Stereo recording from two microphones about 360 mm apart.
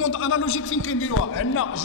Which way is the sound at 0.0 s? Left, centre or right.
Left.